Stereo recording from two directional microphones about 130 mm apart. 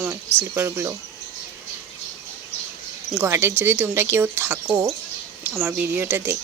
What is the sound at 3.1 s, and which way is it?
Speech, 20° right (ahead or behind).